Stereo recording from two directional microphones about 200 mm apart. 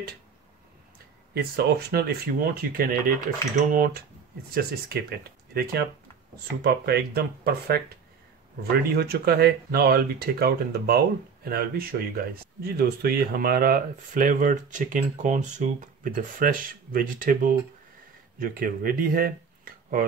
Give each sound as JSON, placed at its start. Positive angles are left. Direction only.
{"t": 1.3, "sound": "speech", "side_deg": -50}
{"t": 8.9, "sound": "speech", "side_deg": -50}